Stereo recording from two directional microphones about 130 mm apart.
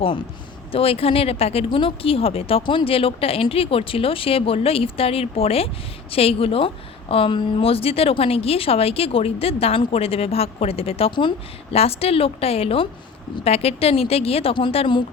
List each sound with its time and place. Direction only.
0.0 s speech: 40° left (ahead or behind)